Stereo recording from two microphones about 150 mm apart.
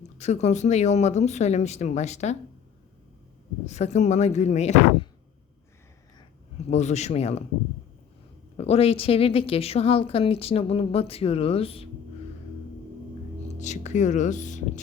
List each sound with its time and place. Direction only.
0.2 s speech: 50° left (ahead or behind)
3.7 s speech: 50° left (ahead or behind)
6.7 s speech: 50° left (ahead or behind)
8.5 s a woman's voice: 40° left (ahead or behind)
13.6 s speech: 50° left (ahead or behind)